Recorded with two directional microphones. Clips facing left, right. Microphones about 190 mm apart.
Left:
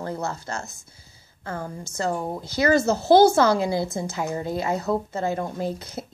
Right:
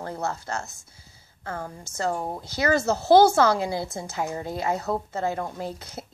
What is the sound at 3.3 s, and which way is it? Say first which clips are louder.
A woman's voice: left 2 dB; 35° left (ahead or behind).